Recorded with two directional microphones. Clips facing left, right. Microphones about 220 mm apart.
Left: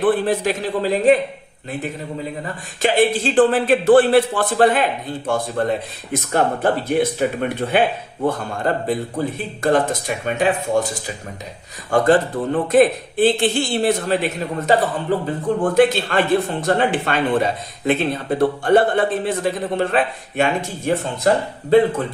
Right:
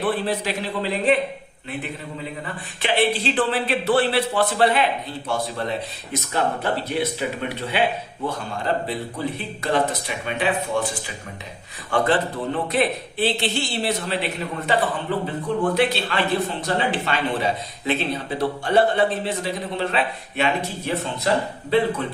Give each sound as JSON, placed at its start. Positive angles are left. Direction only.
{"t": 0.0, "sound": "speech", "side_deg": 50}
{"t": 2.8, "sound": "speech", "side_deg": 45}